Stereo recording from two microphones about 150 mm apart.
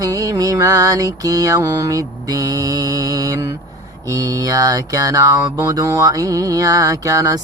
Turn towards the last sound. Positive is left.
turn(degrees=-25)  # may be behind; listen again after turning